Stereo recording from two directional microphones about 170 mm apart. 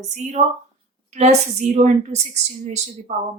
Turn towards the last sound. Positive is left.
turn(degrees=-40)  # may be behind; listen again after turning